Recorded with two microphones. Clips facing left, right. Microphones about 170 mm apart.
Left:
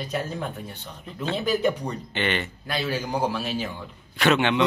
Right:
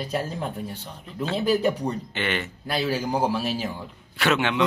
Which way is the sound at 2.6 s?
35° right (ahead or behind).